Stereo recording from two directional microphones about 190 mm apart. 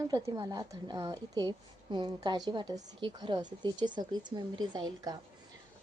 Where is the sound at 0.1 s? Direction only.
20° right (ahead or behind).